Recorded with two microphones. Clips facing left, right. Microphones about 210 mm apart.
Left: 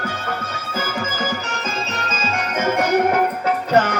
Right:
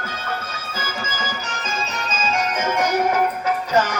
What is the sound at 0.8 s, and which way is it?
Music, 60° left (ahead or behind).